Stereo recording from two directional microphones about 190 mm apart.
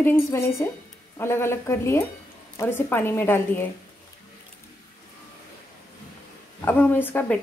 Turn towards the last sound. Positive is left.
turn(degrees=10)  # may be behind; listen again after turning